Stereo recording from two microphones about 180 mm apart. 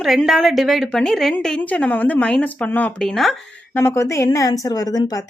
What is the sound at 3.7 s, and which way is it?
A woman's voice, 15° left (ahead or behind).